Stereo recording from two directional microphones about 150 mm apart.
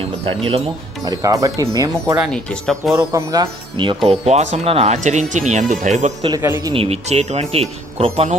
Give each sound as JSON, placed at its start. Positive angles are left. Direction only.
{"t": 1.0, "sound": "speech", "side_deg": -25}
{"t": 2.3, "sound": "speech", "side_deg": 5}
{"t": 2.9, "sound": "speech", "side_deg": -20}
{"t": 4.9, "sound": "speech", "side_deg": -55}
{"t": 6.2, "sound": "speech", "side_deg": -20}
{"t": 6.7, "sound": "speech", "side_deg": -45}